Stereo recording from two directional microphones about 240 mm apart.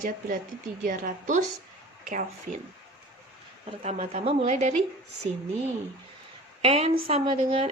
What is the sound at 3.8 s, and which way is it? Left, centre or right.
Speech, right.